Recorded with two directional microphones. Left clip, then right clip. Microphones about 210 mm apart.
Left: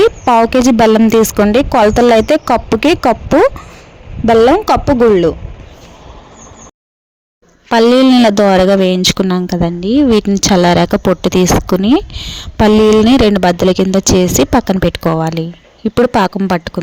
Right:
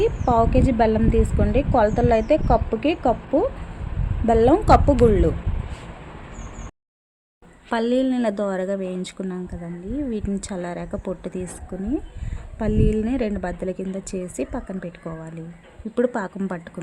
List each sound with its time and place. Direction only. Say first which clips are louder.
0.0 s speech: left 10 dB; 45° left (ahead or behind)
7.7 s speech: left 14 dB; 40° left (ahead or behind)